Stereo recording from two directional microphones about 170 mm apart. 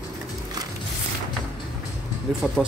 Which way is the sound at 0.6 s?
25° right (ahead or behind).